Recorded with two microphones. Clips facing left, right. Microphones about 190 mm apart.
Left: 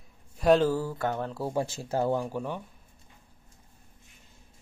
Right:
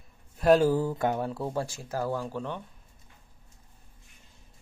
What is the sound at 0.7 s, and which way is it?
Speech, 20° right (ahead or behind).